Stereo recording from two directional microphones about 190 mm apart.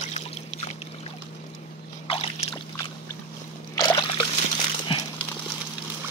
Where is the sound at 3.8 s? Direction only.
20° left (ahead or behind).